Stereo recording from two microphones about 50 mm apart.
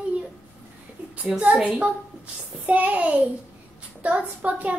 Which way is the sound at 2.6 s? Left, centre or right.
Right.